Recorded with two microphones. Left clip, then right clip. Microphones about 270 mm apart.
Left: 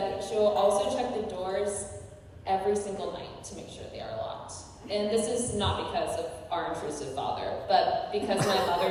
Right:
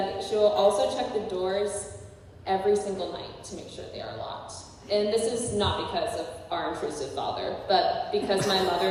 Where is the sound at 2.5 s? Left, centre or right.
Right.